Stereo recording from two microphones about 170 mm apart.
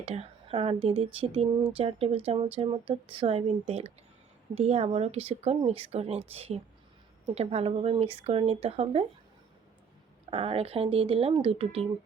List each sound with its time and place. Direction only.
0.0 s a woman's voice: 40° right (ahead or behind)
10.2 s a woman's voice: 35° right (ahead or behind)